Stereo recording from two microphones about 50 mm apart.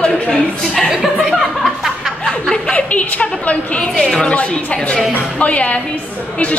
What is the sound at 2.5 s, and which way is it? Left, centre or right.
A woman's voice, left.